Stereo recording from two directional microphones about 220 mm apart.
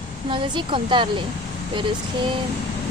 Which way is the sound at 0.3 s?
20° right (ahead or behind).